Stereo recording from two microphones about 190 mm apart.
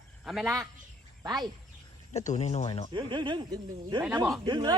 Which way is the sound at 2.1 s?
35° left (ahead or behind).